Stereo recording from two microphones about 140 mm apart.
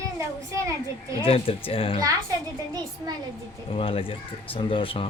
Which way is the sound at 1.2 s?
40° left (ahead or behind).